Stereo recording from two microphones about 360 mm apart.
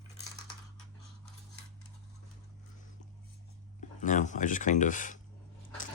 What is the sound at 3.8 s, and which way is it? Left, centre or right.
Speech, left.